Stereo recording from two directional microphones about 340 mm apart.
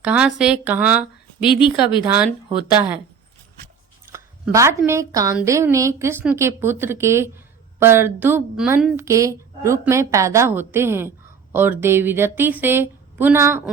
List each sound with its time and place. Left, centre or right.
0.0 s speech: centre
2.0 s speech: centre
4.1 s speech: centre